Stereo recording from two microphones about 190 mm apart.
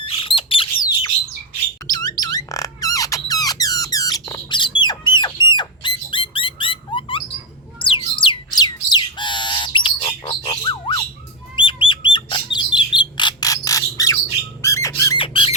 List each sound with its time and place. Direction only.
0.0 s bird: 30° left (ahead or behind)
1.9 s squeak: 20° left (ahead or behind)
7.8 s squawk: 25° left (ahead or behind)
11.5 s bird: 25° left (ahead or behind)
14.6 s squawk: 15° left (ahead or behind)
15.2 s squawk: 30° left (ahead or behind)